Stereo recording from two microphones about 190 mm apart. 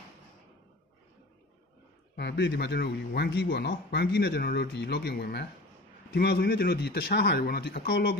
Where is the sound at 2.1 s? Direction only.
60° left (ahead or behind).